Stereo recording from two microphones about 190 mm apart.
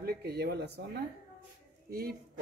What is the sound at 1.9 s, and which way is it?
Speech, 50° right (ahead or behind).